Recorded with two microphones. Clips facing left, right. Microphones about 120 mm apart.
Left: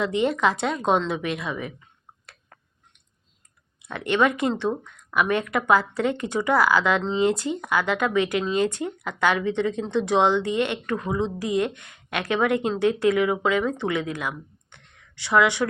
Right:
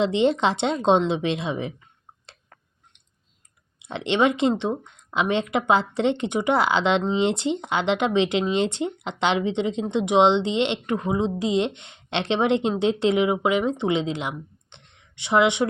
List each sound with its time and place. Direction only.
0.0 s speech: 25° right (ahead or behind)
3.8 s speech: 20° right (ahead or behind)